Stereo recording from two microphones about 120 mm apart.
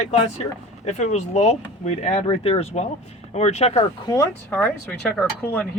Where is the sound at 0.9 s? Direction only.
70° left (ahead or behind).